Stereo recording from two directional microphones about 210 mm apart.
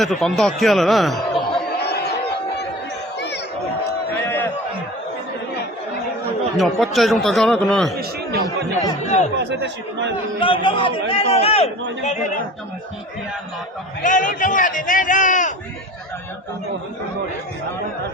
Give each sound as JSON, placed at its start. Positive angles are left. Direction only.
{"t": 0.0, "sound": "speech", "side_deg": 0}
{"t": 1.8, "sound": "a sound", "side_deg": 50}
{"t": 3.2, "sound": "a sound", "side_deg": 55}
{"t": 4.2, "sound": "crowd", "side_deg": 10}
{"t": 6.6, "sound": "speech", "side_deg": 0}
{"t": 8.4, "sound": "speech", "side_deg": 15}
{"t": 9.0, "sound": "a man's voice", "side_deg": 35}
{"t": 9.4, "sound": "speech", "side_deg": -55}
{"t": 10.4, "sound": "a man's voice", "side_deg": 25}
{"t": 14.0, "sound": "a man's voice", "side_deg": 40}